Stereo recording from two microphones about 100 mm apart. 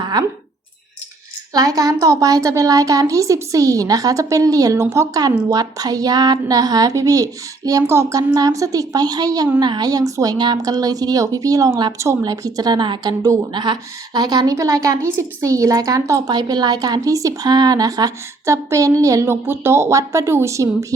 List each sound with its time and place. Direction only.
0.0 s a sound: 40° right (ahead or behind)
1.5 s a woman's voice: 35° right (ahead or behind)
16.3 s a woman's voice: 45° right (ahead or behind)